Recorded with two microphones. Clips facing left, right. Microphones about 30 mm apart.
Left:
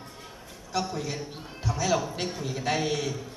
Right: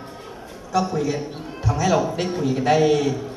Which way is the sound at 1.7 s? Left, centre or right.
Right.